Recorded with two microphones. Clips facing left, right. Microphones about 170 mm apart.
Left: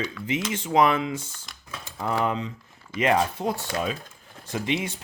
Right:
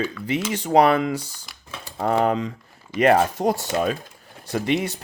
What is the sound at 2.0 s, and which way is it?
Speech, 50° right (ahead or behind).